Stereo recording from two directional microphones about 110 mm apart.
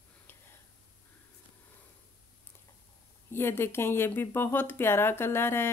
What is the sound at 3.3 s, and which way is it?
Speech, 20° left (ahead or behind).